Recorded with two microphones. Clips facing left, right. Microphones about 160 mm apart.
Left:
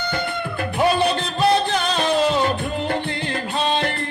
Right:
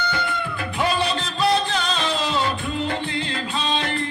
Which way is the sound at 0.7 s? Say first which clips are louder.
Left 4 dB; 55° left (ahead or behind).